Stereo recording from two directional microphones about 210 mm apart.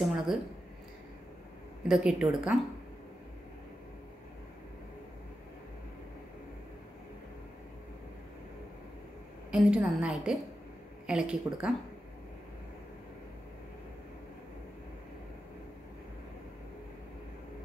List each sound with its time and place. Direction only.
0.0 s a sound: centre (ahead or behind)
1.9 s a woman's voice: 5° right (ahead or behind)
9.5 s a woman's voice: 5° right (ahead or behind)